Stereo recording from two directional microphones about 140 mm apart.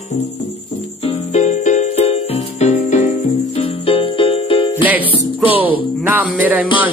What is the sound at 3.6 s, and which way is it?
Music, 40° left (ahead or behind).